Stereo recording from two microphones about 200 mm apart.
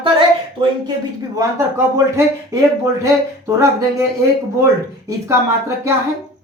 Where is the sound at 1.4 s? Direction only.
15° right (ahead or behind).